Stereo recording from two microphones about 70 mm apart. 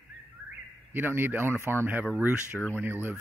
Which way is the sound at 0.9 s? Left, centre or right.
Right.